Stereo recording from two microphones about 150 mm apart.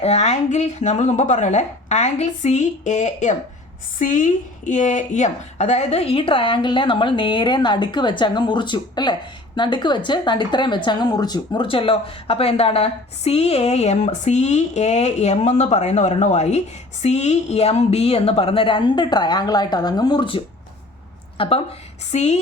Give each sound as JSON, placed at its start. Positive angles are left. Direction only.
{"t": 0.0, "sound": "a woman's voice", "side_deg": 45}